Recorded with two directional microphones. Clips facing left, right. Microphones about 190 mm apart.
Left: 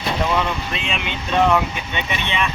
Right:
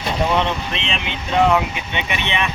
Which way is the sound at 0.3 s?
25° right (ahead or behind).